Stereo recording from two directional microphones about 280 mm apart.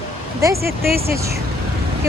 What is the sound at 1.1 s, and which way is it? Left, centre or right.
Speech, centre.